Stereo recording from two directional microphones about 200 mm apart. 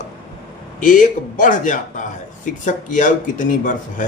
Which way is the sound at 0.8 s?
40° left (ahead or behind).